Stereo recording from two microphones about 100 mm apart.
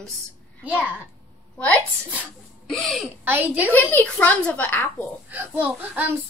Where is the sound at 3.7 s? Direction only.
15° left (ahead or behind).